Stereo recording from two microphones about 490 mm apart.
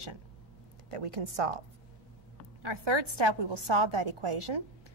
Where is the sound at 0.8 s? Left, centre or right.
Right.